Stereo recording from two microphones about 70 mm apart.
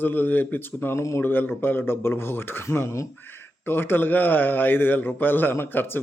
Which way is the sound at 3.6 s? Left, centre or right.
Left.